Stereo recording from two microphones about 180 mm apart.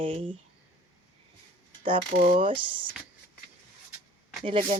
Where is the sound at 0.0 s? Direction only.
30° right (ahead or behind).